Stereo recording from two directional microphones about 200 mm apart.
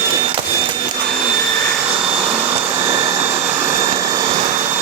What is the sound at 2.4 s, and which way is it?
Vacuum cleaner, 15° right (ahead or behind).